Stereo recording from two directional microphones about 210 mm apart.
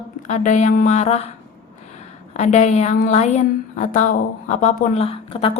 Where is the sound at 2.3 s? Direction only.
35° left (ahead or behind).